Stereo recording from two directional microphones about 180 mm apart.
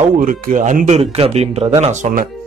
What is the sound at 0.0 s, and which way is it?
A man's voice, 45° right (ahead or behind).